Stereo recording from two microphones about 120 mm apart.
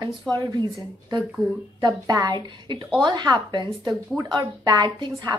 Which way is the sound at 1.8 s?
30° right (ahead or behind).